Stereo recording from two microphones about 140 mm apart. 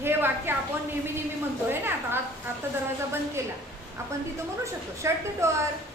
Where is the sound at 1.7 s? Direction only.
15° right (ahead or behind).